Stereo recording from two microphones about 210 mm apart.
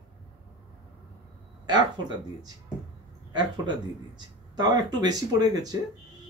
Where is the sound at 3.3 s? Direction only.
20° right (ahead or behind).